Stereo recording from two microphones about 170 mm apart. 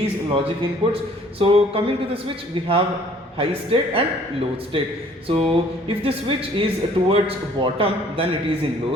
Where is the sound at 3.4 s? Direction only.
35° right (ahead or behind).